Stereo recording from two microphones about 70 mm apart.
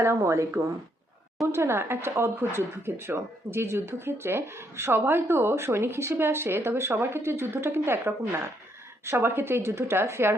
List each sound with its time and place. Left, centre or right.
0.0 s speech: right